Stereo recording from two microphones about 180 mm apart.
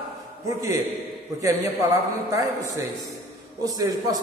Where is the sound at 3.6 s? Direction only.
20° right (ahead or behind).